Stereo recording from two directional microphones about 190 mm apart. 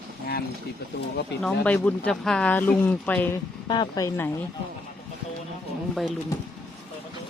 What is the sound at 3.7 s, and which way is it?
Speech, 20° left (ahead or behind).